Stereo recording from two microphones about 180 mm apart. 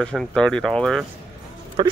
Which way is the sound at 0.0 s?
5° left (ahead or behind).